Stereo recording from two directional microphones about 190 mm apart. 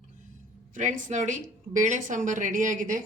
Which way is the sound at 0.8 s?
40° right (ahead or behind).